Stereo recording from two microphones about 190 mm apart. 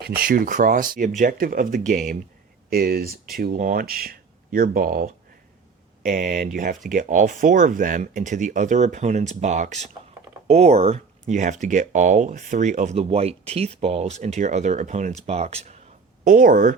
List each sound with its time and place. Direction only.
0.0 s speech: 50° right (ahead or behind)
6.1 s speech: 45° right (ahead or behind)
16.2 s speech: 45° right (ahead or behind)